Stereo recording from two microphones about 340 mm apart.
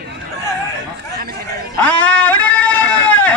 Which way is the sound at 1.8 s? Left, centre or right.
Centre.